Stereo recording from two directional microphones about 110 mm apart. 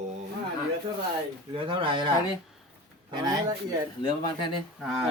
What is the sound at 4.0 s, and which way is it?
Speech, 45° left (ahead or behind).